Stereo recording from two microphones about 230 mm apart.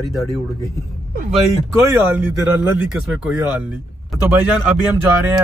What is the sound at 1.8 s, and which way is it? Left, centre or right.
A man's voice, centre.